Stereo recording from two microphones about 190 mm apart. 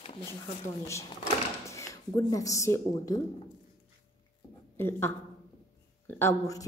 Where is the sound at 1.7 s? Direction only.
15° left (ahead or behind).